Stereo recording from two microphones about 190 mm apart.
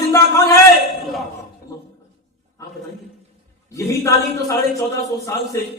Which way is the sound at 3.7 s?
15° left (ahead or behind).